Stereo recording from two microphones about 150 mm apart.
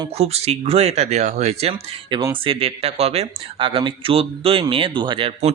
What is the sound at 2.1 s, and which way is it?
Speech, 20° right (ahead or behind).